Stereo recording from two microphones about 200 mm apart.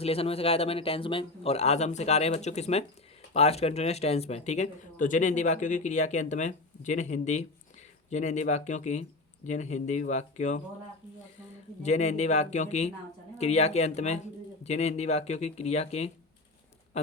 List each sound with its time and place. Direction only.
0.0 s speech: 30° left (ahead or behind)
11.8 s speech: 35° left (ahead or behind)